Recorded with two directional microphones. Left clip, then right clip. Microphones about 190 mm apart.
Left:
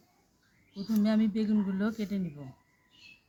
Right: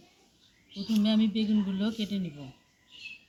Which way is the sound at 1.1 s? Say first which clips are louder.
Right 2 dB; 45° left (ahead or behind).